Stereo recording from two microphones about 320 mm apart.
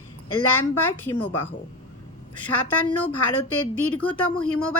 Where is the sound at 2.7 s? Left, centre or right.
Centre.